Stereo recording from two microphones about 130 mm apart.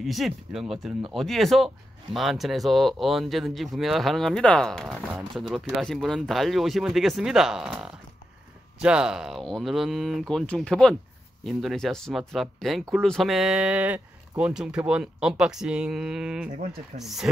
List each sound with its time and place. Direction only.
0.0 s speech: centre (ahead or behind)